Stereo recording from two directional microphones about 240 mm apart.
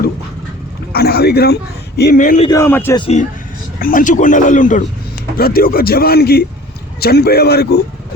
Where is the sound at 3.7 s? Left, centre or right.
Left.